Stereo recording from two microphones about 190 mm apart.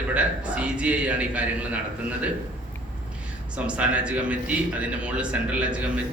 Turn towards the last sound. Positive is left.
turn(degrees=-5)  # may be behind; listen again after turning